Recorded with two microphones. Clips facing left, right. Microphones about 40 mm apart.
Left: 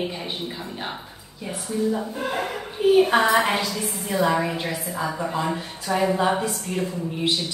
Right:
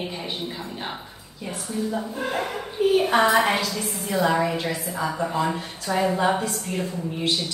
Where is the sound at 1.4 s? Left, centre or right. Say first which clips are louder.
Left 3 dB; centre.